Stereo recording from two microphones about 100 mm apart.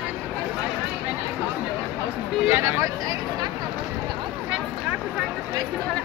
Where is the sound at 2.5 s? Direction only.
25° right (ahead or behind).